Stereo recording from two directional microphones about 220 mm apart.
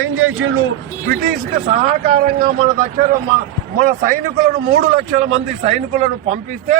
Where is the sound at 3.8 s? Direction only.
40° right (ahead or behind).